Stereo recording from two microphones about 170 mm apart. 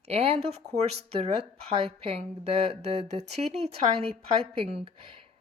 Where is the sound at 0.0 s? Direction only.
35° right (ahead or behind).